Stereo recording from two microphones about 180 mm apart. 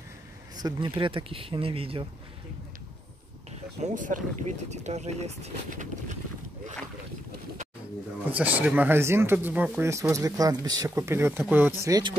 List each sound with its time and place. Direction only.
0.6 s speech: 25° right (ahead or behind)
3.8 s speech: 45° right (ahead or behind)
8.3 s speech: 10° right (ahead or behind)